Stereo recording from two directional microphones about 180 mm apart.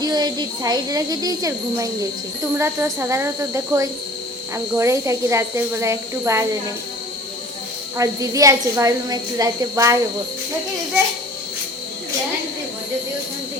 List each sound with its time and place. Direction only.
0.0 s a woman's voice: 25° right (ahead or behind)
7.9 s a woman's voice: 20° right (ahead or behind)